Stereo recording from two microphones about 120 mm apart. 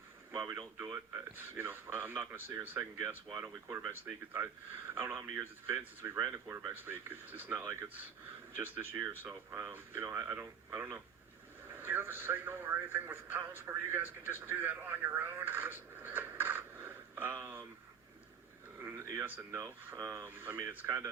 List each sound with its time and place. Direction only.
0.4 s speech: 30° right (ahead or behind)
0.9 s speech: 20° right (ahead or behind)
18.8 s speech: 20° right (ahead or behind)